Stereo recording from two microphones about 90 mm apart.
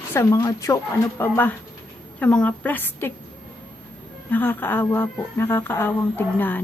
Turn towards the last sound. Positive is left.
turn(degrees=20)  # may be behind; listen again after turning